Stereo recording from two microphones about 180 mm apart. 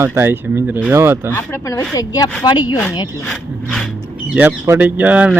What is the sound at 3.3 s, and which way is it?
Speech, 5° left (ahead or behind).